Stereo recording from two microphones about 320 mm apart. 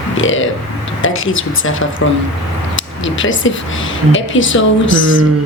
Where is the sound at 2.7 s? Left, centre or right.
Left.